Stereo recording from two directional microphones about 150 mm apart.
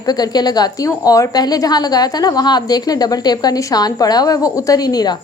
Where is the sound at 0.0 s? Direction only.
25° left (ahead or behind).